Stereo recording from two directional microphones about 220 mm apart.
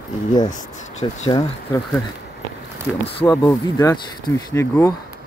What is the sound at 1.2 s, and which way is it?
Speech, 15° left (ahead or behind).